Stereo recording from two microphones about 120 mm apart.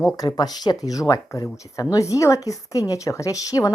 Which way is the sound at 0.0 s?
35° left (ahead or behind).